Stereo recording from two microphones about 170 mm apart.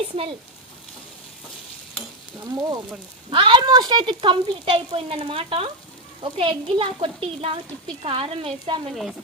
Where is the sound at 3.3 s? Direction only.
30° right (ahead or behind).